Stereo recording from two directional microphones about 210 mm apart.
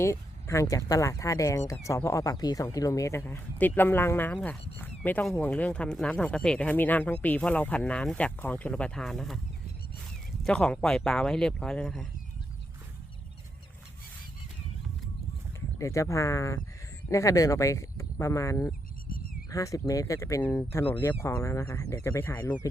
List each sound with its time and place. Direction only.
0.0 s speech: 15° left (ahead or behind)
10.4 s speech: 5° left (ahead or behind)
15.8 s speech: 15° left (ahead or behind)